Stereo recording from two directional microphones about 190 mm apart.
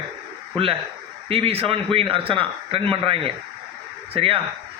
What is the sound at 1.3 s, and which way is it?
A man's voice, 30° right (ahead or behind).